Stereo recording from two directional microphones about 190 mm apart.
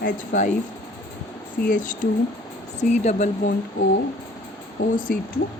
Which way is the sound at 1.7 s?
45° left (ahead or behind).